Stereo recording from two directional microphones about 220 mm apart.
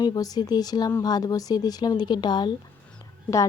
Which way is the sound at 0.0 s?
20° left (ahead or behind).